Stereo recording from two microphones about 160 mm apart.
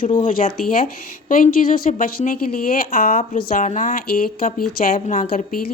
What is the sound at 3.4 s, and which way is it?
Speech, 55° left (ahead or behind).